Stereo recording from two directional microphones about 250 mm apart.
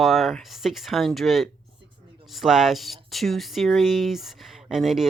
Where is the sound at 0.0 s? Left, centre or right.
Centre.